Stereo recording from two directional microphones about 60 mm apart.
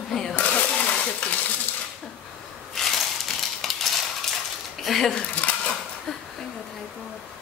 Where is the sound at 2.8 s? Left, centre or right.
Centre.